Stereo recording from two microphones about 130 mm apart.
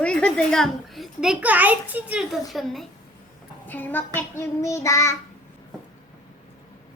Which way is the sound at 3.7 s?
15° left (ahead or behind).